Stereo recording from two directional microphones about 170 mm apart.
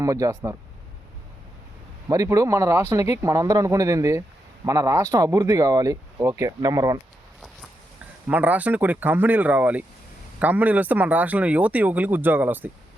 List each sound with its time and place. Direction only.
0.0 s speech: 20° right (ahead or behind)
2.0 s a man's voice: 20° right (ahead or behind)
8.3 s a man's voice: 10° right (ahead or behind)